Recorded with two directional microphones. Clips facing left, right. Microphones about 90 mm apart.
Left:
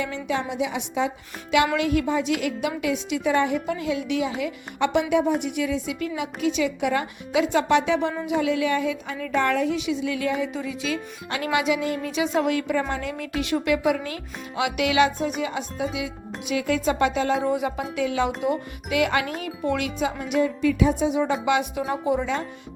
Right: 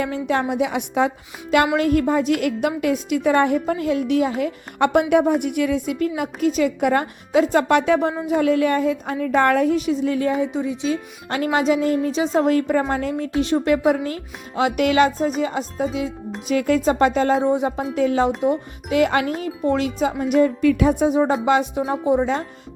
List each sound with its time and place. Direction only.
0.0 s a woman's voice: 50° right (ahead or behind)
17.4 s music: 30° right (ahead or behind)
17.9 s a woman's voice: 40° right (ahead or behind)
20.3 s a woman's voice: 50° right (ahead or behind)